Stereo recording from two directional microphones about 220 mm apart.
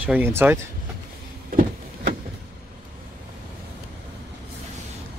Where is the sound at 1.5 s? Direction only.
35° right (ahead or behind).